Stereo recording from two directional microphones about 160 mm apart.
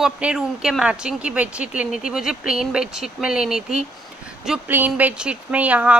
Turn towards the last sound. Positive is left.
turn(degrees=-10)  # may be behind; listen again after turning